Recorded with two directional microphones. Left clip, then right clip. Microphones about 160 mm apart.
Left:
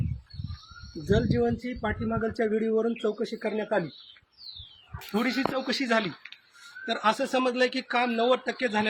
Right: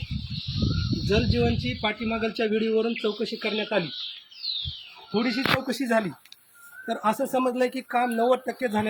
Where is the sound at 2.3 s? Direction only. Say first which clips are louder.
Right 2 dB; 25° left (ahead or behind).